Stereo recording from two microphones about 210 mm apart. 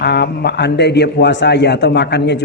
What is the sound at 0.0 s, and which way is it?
A man's voice, 50° left (ahead or behind).